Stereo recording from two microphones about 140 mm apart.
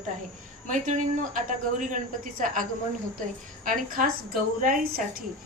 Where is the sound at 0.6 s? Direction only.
65° right (ahead or behind).